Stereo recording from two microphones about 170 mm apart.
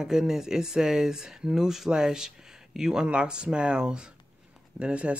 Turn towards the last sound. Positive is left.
turn(degrees=-5)  # may be behind; listen again after turning